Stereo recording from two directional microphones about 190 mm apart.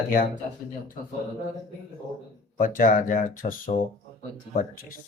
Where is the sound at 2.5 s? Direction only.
45° left (ahead or behind).